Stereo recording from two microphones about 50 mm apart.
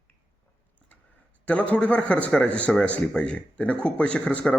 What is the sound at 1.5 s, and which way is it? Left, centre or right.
A man's voice, left.